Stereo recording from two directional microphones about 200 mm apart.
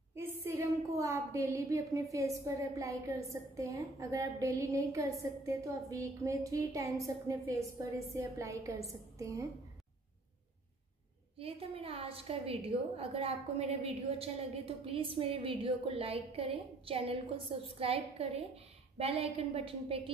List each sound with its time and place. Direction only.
0.1 s a woman's voice: 10° right (ahead or behind)
11.3 s a woman's voice: 30° right (ahead or behind)